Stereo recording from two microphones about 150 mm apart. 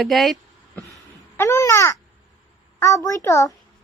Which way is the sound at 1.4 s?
20° left (ahead or behind).